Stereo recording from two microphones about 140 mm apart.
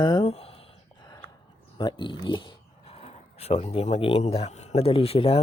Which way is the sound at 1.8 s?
35° left (ahead or behind).